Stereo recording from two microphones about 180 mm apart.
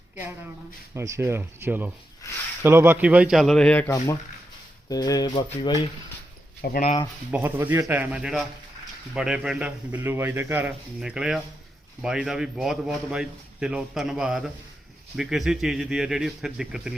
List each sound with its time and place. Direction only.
0.9 s a man's voice: 15° right (ahead or behind); by 3.8 s 5° left (ahead or behind)
3.8 s speech: 20° left (ahead or behind)
6.6 s speech: 60° left (ahead or behind)
7.3 s a man's voice: 10° right (ahead or behind)